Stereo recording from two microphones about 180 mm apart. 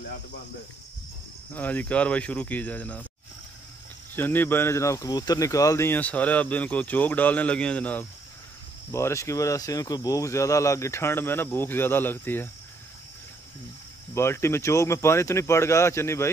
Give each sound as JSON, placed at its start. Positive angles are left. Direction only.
{"t": 1.5, "sound": "speech", "side_deg": 10}
{"t": 4.1, "sound": "speech", "side_deg": 10}
{"t": 14.1, "sound": "speech", "side_deg": 15}